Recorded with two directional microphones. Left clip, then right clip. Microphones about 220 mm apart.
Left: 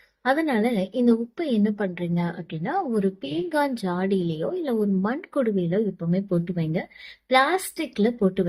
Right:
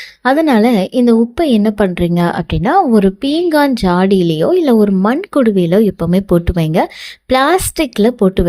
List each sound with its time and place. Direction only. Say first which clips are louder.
0.3 s a woman's voice: right 12 dB; 45° right (ahead or behind)